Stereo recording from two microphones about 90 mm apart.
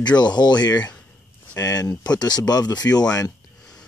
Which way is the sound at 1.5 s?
40° left (ahead or behind).